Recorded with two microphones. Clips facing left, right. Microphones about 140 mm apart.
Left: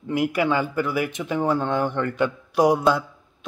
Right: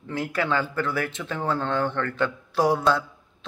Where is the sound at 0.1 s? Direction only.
15° left (ahead or behind).